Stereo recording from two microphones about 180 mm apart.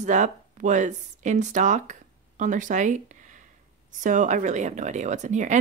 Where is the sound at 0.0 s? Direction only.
45° right (ahead or behind).